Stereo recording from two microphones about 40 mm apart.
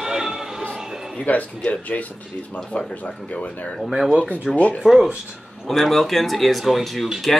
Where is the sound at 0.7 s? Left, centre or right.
Centre.